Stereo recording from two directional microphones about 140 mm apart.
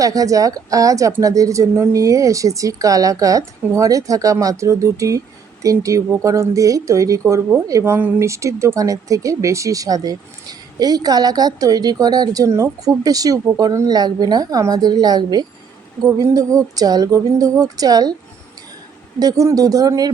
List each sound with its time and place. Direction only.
0.0 s speech: 25° right (ahead or behind)
19.2 s speech: 25° right (ahead or behind)